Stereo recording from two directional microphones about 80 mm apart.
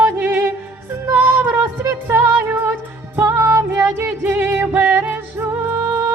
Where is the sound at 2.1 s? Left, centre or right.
Right.